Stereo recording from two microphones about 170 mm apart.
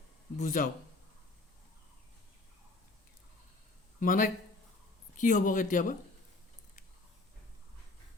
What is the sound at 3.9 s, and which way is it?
Speech, 50° left (ahead or behind).